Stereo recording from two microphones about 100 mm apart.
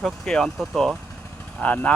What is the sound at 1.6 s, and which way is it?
Speech, 15° left (ahead or behind).